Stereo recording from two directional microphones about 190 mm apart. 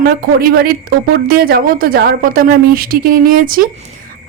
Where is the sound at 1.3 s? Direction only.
55° right (ahead or behind).